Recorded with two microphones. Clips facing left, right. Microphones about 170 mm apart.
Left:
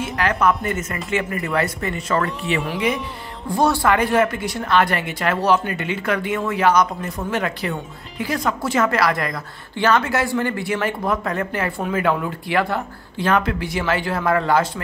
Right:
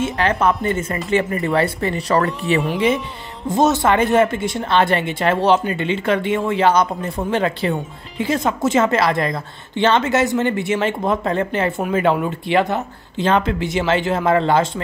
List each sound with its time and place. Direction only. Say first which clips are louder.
0.0 s speech: right 2 dB; 25° right (ahead or behind)
2.7 s speech: right 4 dB; 25° right (ahead or behind)